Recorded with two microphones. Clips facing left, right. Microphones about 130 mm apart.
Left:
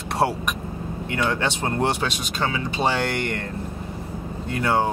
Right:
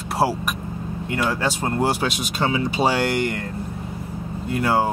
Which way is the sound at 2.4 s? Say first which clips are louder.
Right 4 dB; 20° right (ahead or behind).